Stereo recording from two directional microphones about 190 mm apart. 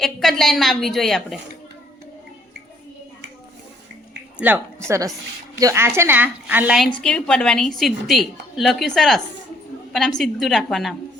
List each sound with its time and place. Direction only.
0.0 s a woman's voice: centre (ahead or behind)
4.4 s a woman's voice: 10° right (ahead or behind)